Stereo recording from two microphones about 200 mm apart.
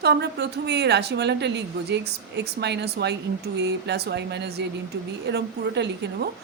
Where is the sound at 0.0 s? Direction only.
55° right (ahead or behind).